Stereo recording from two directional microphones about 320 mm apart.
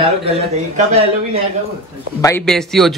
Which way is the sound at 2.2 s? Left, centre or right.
Centre.